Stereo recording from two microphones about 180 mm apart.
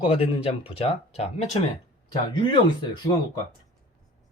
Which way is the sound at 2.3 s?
25° left (ahead or behind).